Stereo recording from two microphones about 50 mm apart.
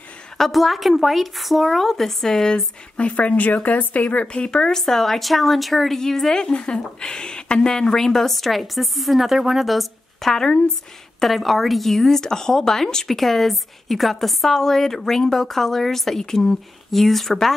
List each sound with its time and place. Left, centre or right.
0.4 s speech: centre
3.1 s a woman's voice: left
11.1 s speech: centre